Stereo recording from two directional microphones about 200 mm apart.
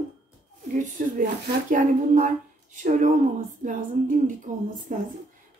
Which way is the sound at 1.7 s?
40° right (ahead or behind).